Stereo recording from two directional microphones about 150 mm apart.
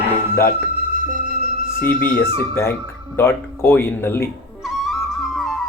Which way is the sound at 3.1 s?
15° left (ahead or behind).